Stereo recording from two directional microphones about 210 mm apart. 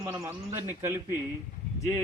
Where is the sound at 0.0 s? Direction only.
10° right (ahead or behind).